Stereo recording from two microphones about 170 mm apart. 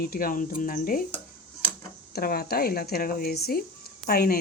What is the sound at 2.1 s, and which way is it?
Speech, 65° left (ahead or behind).